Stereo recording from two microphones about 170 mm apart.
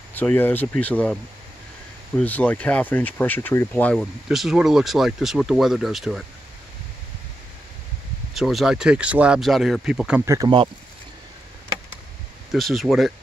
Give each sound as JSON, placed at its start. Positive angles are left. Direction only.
{"t": 0.1, "sound": "speech", "side_deg": 10}
{"t": 2.1, "sound": "speech", "side_deg": 10}
{"t": 8.4, "sound": "speech", "side_deg": 0}
{"t": 10.2, "sound": "speech", "side_deg": -20}
{"t": 12.5, "sound": "speech", "side_deg": 0}